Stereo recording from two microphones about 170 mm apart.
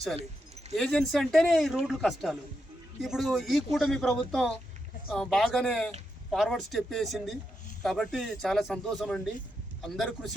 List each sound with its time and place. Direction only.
0.8 s a man's voice: centre (ahead or behind)